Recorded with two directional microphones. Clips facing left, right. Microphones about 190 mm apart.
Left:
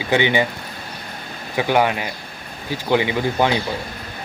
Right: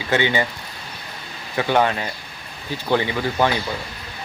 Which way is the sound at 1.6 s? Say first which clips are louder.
Left 1 dB; 10° left (ahead or behind).